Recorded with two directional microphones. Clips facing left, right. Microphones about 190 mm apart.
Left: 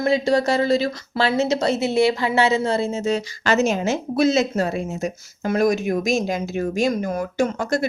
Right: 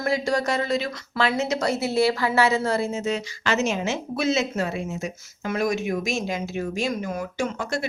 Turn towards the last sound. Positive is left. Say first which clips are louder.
# left 6 dB
turn(degrees=40)  # may be behind; listen again after turning